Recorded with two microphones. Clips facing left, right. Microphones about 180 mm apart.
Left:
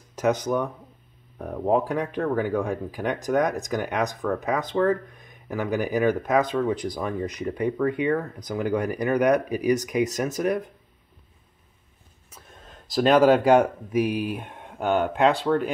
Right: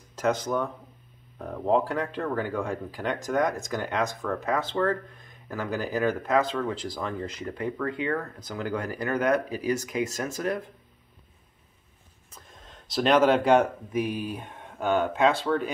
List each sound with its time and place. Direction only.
0.1 s speech: 20° left (ahead or behind)
12.3 s speech: 10° left (ahead or behind)